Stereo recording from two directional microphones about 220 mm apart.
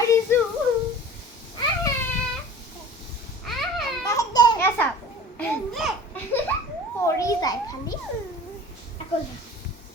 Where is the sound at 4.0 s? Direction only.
15° left (ahead or behind).